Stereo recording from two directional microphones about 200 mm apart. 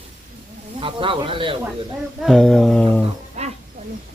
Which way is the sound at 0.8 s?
25° right (ahead or behind).